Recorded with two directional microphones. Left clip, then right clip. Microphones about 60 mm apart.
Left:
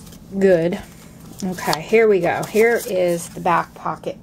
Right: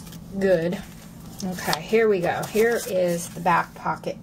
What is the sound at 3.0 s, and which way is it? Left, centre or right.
Speech, left.